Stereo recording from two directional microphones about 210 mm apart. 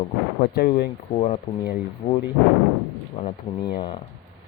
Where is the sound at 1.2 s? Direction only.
30° left (ahead or behind).